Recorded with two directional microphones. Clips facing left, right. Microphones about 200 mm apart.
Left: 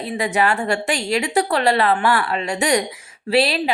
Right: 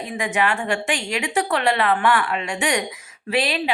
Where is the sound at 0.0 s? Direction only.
35° left (ahead or behind).